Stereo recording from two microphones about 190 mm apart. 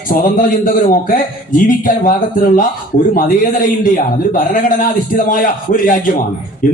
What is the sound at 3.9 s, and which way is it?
A man's voice, 45° left (ahead or behind).